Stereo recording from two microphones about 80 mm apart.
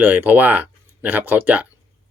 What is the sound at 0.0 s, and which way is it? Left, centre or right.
Speech, right.